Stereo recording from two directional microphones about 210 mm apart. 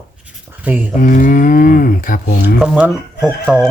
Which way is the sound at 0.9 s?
40° left (ahead or behind).